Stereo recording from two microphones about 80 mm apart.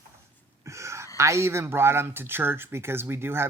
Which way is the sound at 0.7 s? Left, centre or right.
Right.